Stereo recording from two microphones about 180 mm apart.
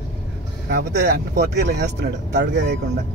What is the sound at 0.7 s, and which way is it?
Speech, 60° right (ahead or behind).